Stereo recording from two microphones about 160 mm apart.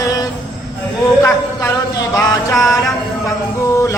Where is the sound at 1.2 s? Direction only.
15° left (ahead or behind).